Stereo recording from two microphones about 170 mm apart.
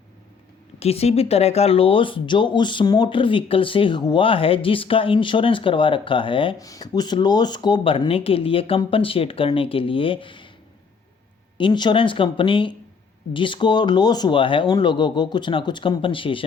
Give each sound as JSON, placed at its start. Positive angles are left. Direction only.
{"t": 0.8, "sound": "speech", "side_deg": 35}
{"t": 11.5, "sound": "speech", "side_deg": 25}